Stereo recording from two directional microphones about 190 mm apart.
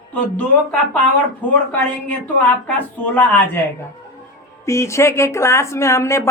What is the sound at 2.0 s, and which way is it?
Speech, 10° left (ahead or behind).